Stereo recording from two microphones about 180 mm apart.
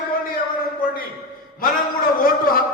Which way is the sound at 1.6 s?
55° left (ahead or behind).